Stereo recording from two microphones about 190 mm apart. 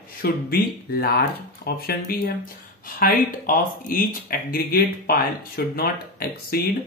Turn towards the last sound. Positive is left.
turn(degrees=55)  # may be behind; listen again after turning